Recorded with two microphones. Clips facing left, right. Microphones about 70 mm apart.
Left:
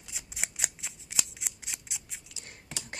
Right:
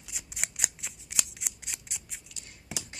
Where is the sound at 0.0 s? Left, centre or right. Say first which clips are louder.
Even; centre.